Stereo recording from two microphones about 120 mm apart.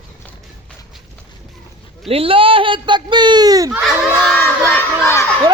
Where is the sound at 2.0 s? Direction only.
50° right (ahead or behind); by 3.7 s 30° right (ahead or behind).